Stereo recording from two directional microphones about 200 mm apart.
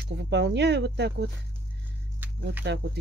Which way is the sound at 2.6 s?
60° right (ahead or behind).